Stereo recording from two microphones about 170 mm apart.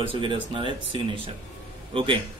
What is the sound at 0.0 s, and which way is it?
Speech, 30° right (ahead or behind).